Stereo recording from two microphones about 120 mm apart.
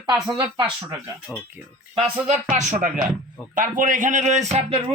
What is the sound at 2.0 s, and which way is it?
Speech, 70° right (ahead or behind).